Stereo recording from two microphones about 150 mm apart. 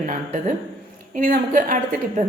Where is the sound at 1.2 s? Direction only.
65° right (ahead or behind).